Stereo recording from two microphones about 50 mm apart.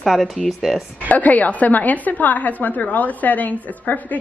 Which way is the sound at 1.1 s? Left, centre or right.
Left.